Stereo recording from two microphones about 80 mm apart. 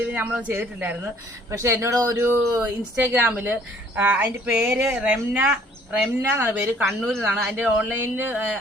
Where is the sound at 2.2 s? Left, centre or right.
Right.